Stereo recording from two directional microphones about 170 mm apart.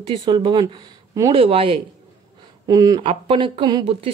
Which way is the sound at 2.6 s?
20° right (ahead or behind).